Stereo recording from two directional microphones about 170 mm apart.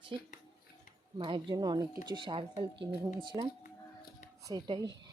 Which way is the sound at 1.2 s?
30° right (ahead or behind).